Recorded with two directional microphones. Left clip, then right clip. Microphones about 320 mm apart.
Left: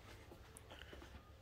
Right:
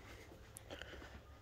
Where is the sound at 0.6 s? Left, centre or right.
Centre.